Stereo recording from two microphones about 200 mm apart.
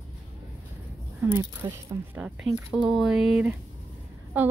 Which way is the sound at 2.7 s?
Centre (ahead or behind).